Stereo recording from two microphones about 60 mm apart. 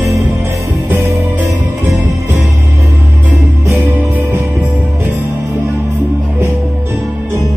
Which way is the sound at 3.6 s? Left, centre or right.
Right.